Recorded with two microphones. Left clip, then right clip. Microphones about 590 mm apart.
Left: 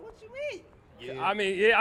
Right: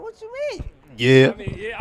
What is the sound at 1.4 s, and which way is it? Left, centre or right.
Speech, left.